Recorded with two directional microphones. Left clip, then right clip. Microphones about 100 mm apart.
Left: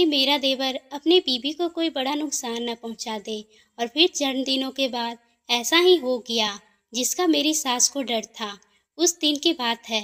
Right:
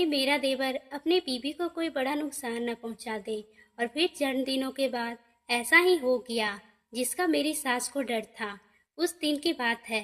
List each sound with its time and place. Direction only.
0.0 s a woman's voice: 30° left (ahead or behind)